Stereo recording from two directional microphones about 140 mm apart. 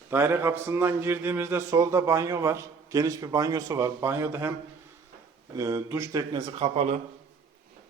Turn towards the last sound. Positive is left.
turn(degrees=-55)  # may be behind; listen again after turning